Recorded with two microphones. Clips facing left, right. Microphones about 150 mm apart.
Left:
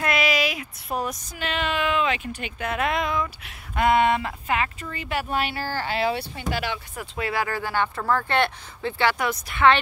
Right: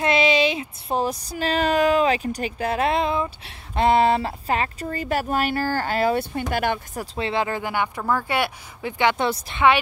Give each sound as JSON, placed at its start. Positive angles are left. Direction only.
{"t": 0.0, "sound": "a sound", "side_deg": -25}
{"t": 7.2, "sound": "speech", "side_deg": -25}
{"t": 9.2, "sound": "speech", "side_deg": -30}